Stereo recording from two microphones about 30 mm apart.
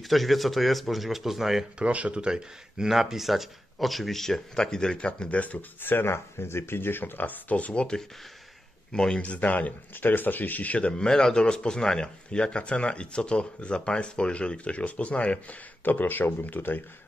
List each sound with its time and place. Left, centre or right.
0.1 s speech: centre
1.8 s speech: right
2.2 s speech: right
2.9 s speech: centre
4.2 s speech: centre
4.9 s speech: left
5.3 s speech: left
7.0 s speech: left
7.7 s speech: left
9.2 s speech: left
10.8 s speech: left
12.3 s speech: left
15.8 s speech: left